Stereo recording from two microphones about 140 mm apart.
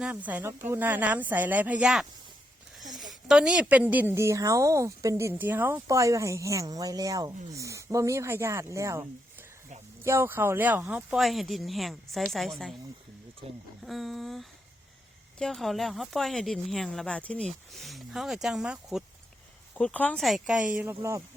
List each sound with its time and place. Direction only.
0.0 s a woman's voice: 10° right (ahead or behind)
11.2 s a woman's voice: centre (ahead or behind)
13.8 s a woman's voice: centre (ahead or behind)
19.7 s a woman's voice: 10° left (ahead or behind); by 21.2 s 15° right (ahead or behind)